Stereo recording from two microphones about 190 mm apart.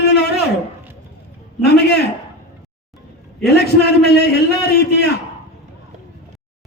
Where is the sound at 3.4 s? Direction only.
60° left (ahead or behind).